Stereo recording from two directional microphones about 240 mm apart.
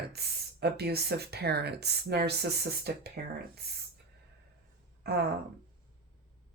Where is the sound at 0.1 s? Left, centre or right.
Right.